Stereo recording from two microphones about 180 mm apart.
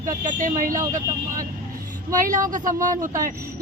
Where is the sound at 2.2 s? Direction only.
50° right (ahead or behind).